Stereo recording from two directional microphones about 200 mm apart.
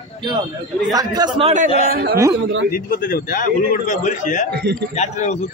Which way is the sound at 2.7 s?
45° left (ahead or behind).